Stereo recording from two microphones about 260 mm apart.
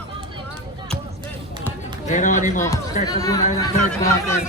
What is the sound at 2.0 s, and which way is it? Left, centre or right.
Speech, left.